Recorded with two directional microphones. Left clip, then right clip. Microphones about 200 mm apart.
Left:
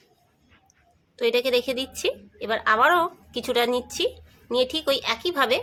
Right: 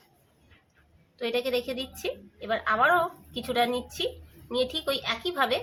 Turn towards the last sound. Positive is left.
turn(degrees=35)  # may be behind; listen again after turning